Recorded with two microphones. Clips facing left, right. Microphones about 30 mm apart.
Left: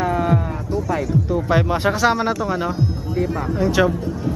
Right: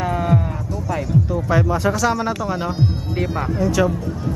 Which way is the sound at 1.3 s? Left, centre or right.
Left.